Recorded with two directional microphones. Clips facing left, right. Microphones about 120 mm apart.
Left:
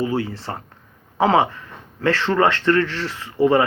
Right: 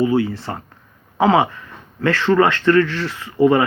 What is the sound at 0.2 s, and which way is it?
Speech, 30° left (ahead or behind).